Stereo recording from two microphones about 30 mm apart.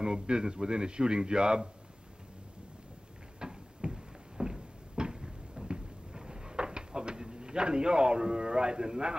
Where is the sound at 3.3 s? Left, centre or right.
Right.